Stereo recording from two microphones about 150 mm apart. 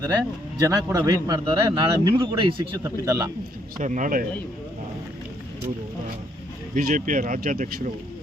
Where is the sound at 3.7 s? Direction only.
60° right (ahead or behind).